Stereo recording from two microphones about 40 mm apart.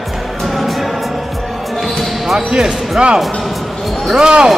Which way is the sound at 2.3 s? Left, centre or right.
Centre.